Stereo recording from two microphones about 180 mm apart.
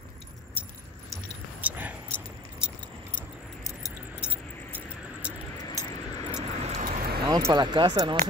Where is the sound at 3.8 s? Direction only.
5° right (ahead or behind).